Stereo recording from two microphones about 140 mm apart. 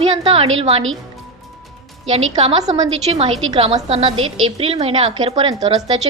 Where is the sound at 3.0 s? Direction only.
45° right (ahead or behind).